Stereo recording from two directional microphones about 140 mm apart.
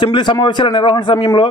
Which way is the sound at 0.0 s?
35° left (ahead or behind).